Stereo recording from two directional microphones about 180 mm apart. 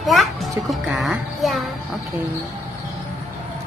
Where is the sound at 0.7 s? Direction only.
Centre (ahead or behind).